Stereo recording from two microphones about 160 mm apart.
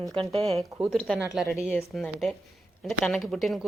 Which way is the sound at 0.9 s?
5° left (ahead or behind).